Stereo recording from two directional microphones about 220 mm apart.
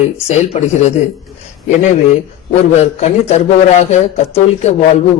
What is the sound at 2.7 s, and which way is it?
Speech, 30° left (ahead or behind).